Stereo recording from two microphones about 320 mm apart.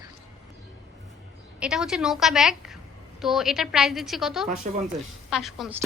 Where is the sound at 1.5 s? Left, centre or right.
Centre.